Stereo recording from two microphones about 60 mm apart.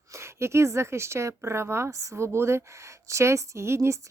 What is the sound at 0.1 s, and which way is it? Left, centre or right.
A woman's voice, right.